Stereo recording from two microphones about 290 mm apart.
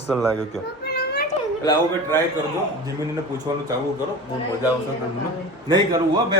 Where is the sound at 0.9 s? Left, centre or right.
Left.